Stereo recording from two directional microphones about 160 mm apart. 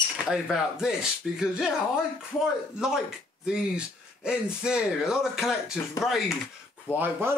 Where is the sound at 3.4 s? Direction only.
5° right (ahead or behind).